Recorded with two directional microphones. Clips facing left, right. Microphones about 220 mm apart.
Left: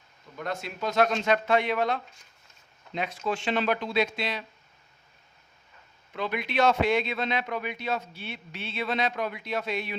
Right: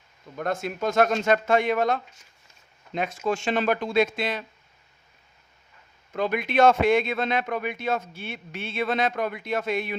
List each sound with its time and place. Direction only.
0.3 s a man's voice: 50° right (ahead or behind)
6.1 s a man's voice: 45° right (ahead or behind)